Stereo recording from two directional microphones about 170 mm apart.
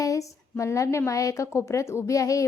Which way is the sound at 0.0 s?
20° left (ahead or behind).